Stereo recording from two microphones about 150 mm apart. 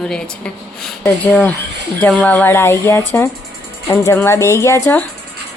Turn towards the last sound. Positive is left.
turn(degrees=15)  # may be behind; listen again after turning